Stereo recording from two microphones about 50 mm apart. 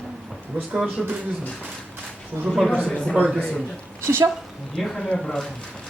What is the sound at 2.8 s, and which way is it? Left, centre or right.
Speech, left.